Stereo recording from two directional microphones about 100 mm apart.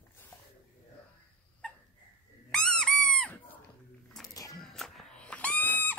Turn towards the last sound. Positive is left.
turn(degrees=20)  # may be behind; listen again after turning